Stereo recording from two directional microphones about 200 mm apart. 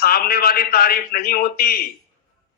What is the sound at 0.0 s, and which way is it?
A man's voice, 50° left (ahead or behind).